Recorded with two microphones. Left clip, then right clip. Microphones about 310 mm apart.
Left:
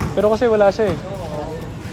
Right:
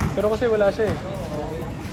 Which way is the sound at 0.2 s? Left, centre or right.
Left.